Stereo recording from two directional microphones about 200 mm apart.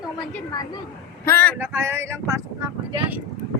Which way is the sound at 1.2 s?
10° left (ahead or behind).